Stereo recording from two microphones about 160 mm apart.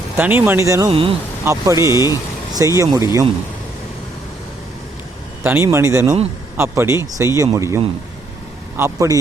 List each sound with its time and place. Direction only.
0.2 s speech: 10° right (ahead or behind)
0.9 s speech: 35° right (ahead or behind)
1.7 s speech: 25° left (ahead or behind)
2.5 s speech: 20° right (ahead or behind)
5.4 s a man's voice: 15° right (ahead or behind)